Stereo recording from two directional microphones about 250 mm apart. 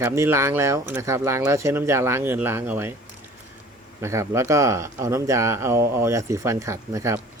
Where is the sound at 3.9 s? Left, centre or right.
Centre.